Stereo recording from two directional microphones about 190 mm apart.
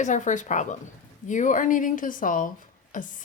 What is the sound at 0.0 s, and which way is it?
A woman's voice, 40° left (ahead or behind).